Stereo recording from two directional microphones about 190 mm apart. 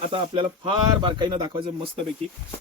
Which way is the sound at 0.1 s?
25° right (ahead or behind).